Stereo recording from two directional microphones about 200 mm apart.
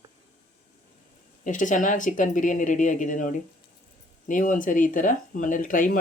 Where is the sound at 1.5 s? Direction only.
40° left (ahead or behind).